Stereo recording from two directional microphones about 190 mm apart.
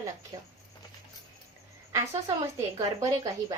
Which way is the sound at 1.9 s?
15° right (ahead or behind).